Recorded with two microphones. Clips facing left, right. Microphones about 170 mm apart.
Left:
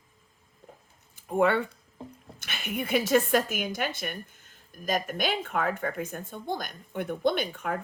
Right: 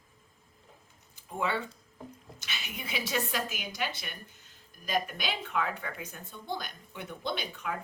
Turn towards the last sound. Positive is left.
turn(degrees=50)  # may be behind; listen again after turning